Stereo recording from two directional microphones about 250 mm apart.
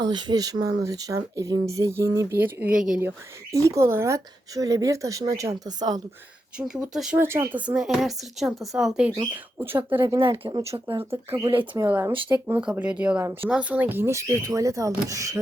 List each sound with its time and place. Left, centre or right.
0.0 s speech: centre
6.6 s speech: centre
12.5 s speech: centre